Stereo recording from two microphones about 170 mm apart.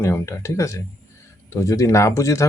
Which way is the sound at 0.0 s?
15° left (ahead or behind).